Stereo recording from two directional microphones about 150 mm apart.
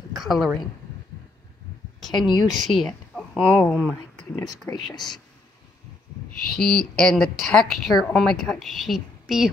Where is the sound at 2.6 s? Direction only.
Centre (ahead or behind).